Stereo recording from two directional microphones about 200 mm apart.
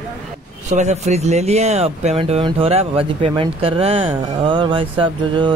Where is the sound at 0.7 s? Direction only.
35° right (ahead or behind).